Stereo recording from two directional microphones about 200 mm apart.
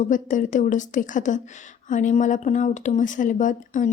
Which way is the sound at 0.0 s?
40° left (ahead or behind).